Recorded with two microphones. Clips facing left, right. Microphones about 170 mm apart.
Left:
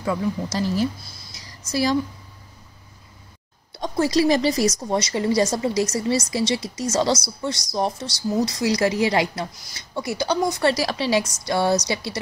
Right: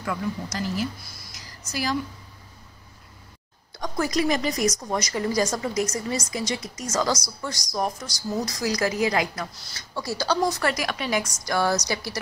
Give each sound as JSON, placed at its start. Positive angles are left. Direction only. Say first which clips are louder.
{"t": 0.0, "sound": "a woman's voice", "louder": "left 5 dB", "side_deg": 25}
{"t": 3.7, "sound": "a woman's voice", "louder": "left 5 dB", "side_deg": 30}